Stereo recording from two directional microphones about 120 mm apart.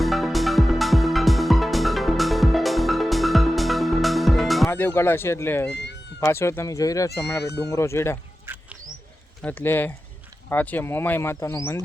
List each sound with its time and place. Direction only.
0.0 s music: centre (ahead or behind)
4.7 s speech: 20° left (ahead or behind)
8.5 s bird: 20° right (ahead or behind)
9.4 s speech: 15° left (ahead or behind)